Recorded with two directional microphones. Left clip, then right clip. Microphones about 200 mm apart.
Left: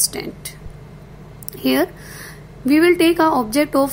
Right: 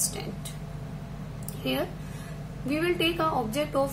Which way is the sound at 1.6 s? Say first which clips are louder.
Left 12 dB; 50° left (ahead or behind).